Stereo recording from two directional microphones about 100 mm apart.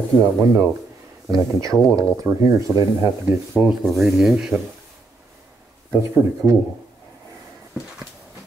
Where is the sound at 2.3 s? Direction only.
10° right (ahead or behind).